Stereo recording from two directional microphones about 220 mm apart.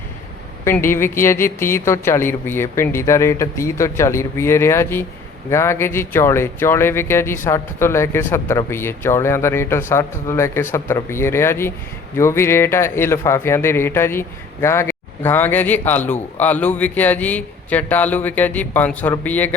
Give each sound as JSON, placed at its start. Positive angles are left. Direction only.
{"t": 0.6, "sound": "speech", "side_deg": 10}